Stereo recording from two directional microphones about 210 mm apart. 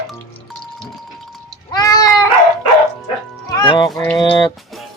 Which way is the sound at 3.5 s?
20° left (ahead or behind).